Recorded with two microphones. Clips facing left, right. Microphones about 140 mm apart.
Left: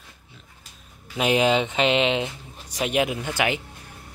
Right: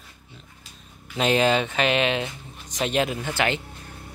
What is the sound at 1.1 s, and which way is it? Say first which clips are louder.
Speech: even; 15° left (ahead or behind).